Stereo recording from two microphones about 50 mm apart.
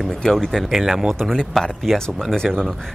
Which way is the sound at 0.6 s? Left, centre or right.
Centre.